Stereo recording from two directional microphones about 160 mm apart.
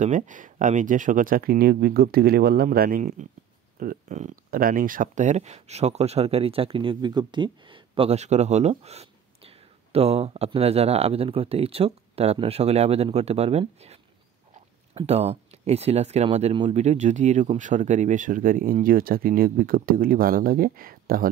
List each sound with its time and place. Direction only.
0.0 s speech: 50° right (ahead or behind)
15.0 s speech: 40° right (ahead or behind); by 21.3 s 65° right (ahead or behind)